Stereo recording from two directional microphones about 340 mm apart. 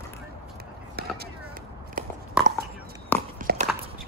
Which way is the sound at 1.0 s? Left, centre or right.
Right.